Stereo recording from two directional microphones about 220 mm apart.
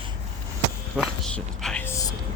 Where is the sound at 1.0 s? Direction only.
Centre (ahead or behind).